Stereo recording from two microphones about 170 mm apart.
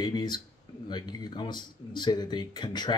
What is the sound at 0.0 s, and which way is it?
Speech, 25° left (ahead or behind).